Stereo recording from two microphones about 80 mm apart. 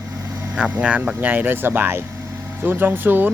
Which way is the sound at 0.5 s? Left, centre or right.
Centre.